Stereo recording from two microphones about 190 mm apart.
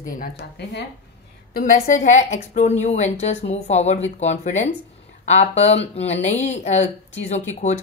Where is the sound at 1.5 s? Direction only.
45° left (ahead or behind).